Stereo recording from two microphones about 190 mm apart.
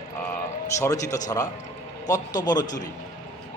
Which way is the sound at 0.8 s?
20° left (ahead or behind).